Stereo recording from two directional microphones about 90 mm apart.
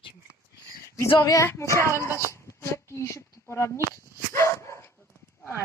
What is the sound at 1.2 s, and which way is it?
Speech, 35° left (ahead or behind).